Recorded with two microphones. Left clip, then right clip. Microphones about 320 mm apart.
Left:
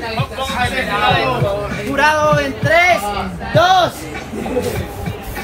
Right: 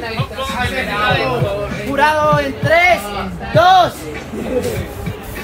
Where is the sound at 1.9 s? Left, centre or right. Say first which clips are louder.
Even; right.